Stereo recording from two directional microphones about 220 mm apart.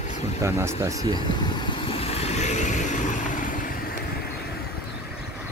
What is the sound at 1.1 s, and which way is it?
Vehicle, 20° left (ahead or behind).